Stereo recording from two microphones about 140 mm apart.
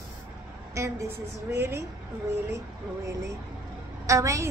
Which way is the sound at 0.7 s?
20° right (ahead or behind).